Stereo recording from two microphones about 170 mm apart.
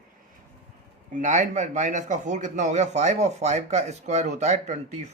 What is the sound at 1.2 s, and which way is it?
Speech, 45° right (ahead or behind).